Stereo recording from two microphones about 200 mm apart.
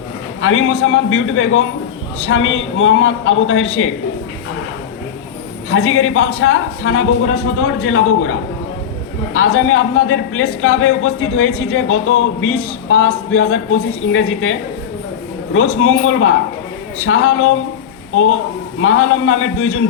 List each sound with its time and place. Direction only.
0.4 s speech: 90° left
5.7 s speech: 90° left
15.5 s speech: 90° left
18.8 s speech: 90° left